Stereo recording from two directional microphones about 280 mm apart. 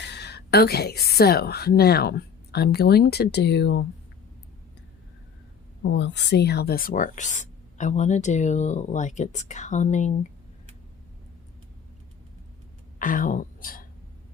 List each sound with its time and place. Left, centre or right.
0.0 s a woman's voice: left
5.8 s speech: left
13.0 s speech: left